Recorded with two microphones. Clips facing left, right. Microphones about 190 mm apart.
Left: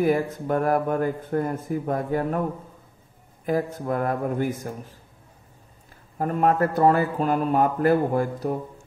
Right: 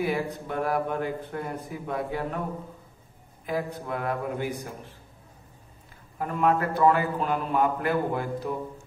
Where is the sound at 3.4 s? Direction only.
45° left (ahead or behind).